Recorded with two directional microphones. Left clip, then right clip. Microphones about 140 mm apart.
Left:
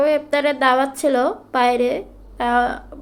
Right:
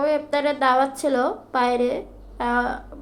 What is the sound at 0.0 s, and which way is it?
A woman's voice, 25° left (ahead or behind).